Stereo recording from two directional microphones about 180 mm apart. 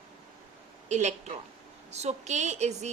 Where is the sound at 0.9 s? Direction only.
40° right (ahead or behind).